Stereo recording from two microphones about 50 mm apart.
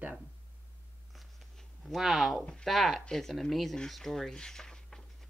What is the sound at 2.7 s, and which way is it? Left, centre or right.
Speech, centre.